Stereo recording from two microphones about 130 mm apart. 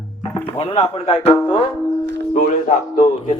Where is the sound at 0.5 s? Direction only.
40° left (ahead or behind).